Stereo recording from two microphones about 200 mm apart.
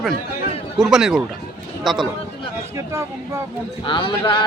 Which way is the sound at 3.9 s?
25° left (ahead or behind).